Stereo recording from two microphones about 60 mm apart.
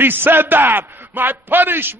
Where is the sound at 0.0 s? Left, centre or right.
Right.